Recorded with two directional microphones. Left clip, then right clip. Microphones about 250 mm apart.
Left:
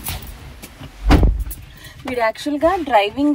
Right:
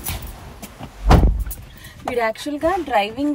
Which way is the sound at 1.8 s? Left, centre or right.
Centre.